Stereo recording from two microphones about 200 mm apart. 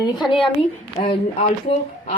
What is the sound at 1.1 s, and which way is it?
Speech, 35° left (ahead or behind).